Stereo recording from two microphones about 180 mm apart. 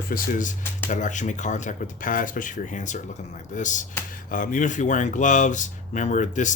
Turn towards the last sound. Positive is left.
turn(degrees=45)  # may be behind; listen again after turning